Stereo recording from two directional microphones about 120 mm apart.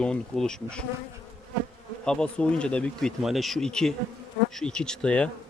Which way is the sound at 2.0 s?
5° left (ahead or behind).